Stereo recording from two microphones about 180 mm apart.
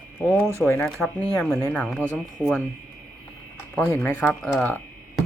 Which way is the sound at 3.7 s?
10° left (ahead or behind).